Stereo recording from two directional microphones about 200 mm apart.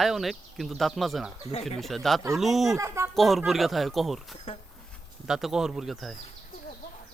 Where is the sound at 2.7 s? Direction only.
15° right (ahead or behind).